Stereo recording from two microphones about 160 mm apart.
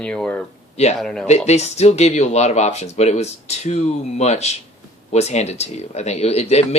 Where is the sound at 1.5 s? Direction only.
45° left (ahead or behind).